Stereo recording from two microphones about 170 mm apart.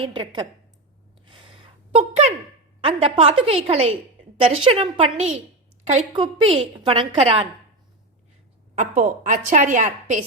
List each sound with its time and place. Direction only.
0.0 s a woman's voice: 30° right (ahead or behind)
1.3 s a sound: 30° right (ahead or behind)
2.8 s a woman's voice: 35° right (ahead or behind)
8.7 s a woman's voice: 45° right (ahead or behind)